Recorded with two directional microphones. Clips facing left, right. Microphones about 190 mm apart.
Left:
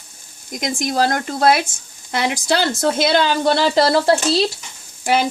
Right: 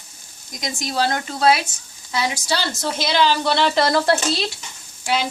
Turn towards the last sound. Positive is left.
turn(degrees=50)  # may be behind; listen again after turning